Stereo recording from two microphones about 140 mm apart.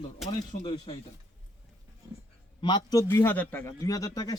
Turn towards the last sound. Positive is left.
turn(degrees=25)  # may be behind; listen again after turning